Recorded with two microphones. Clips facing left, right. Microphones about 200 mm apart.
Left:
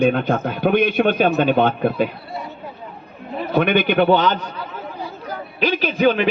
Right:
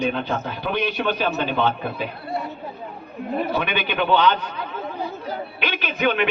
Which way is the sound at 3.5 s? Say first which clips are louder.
Left 8 dB; 50° left (ahead or behind).